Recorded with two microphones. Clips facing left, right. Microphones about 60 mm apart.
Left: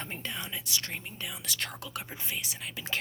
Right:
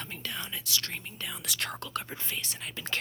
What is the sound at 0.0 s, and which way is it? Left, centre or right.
Whispering, left.